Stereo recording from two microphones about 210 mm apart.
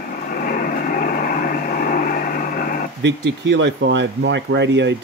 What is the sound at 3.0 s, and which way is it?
Speech, 60° right (ahead or behind).